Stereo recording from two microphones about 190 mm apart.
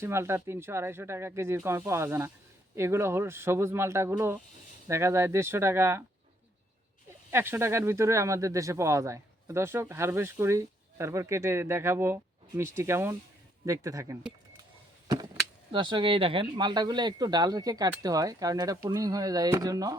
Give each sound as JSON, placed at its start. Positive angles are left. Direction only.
{"t": 0.0, "sound": "speech", "side_deg": -15}
{"t": 7.3, "sound": "speech", "side_deg": -10}
{"t": 15.0, "sound": "a sound", "side_deg": -20}
{"t": 15.7, "sound": "speech", "side_deg": -25}